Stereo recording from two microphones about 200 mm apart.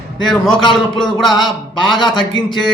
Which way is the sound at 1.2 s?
20° left (ahead or behind).